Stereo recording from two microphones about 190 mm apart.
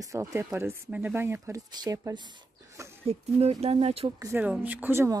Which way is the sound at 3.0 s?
35° right (ahead or behind).